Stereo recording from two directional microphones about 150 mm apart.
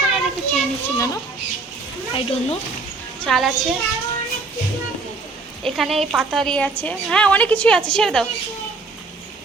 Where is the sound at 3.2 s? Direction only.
Centre (ahead or behind).